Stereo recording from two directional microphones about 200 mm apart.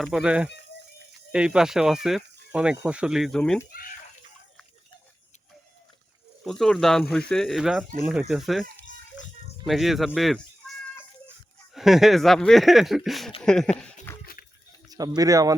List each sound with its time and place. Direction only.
0.0 s speech: 5° right (ahead or behind)
6.4 s speech: centre (ahead or behind)
9.6 s speech: centre (ahead or behind)
10.6 s children playing: 5° left (ahead or behind)
11.7 s speech: centre (ahead or behind)
14.8 s speech: 20° right (ahead or behind)